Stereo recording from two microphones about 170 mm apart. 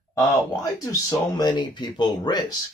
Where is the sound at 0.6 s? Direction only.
20° left (ahead or behind).